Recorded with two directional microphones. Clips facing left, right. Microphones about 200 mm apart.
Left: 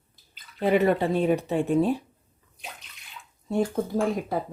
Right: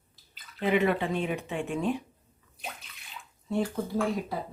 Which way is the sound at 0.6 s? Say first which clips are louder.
Left 4 dB; 40° left (ahead or behind).